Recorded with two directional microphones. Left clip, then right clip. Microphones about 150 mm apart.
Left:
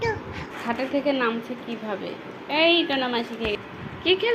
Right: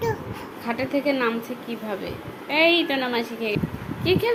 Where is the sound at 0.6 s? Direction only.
15° right (ahead or behind).